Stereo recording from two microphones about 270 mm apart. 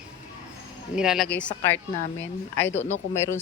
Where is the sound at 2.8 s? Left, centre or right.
Centre.